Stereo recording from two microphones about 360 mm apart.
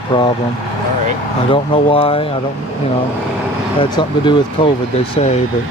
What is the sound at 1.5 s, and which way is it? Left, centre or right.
Speech, centre.